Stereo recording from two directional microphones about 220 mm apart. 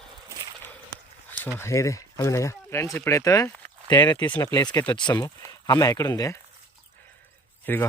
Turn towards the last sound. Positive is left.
turn(degrees=10)  # may be behind; listen again after turning